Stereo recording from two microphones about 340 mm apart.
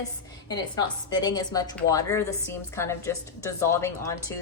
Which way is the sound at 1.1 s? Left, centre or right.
Centre.